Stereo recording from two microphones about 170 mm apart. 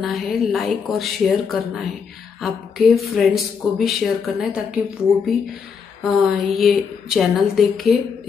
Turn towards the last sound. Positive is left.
turn(degrees=0)  # may be behind; listen again after turning